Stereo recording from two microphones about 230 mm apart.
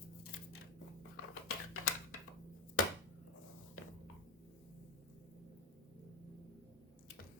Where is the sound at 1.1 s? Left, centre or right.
Left.